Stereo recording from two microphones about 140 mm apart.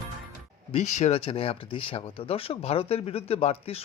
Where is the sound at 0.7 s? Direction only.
55° left (ahead or behind).